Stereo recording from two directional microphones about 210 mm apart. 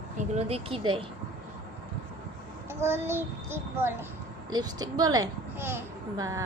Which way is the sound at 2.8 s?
10° right (ahead or behind).